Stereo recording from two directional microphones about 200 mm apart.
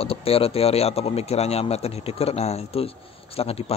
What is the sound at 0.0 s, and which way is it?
Speech, 30° left (ahead or behind).